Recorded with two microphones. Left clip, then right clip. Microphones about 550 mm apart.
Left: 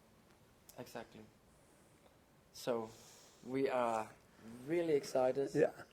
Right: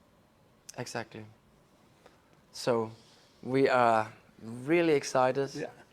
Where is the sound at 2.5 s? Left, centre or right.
Right.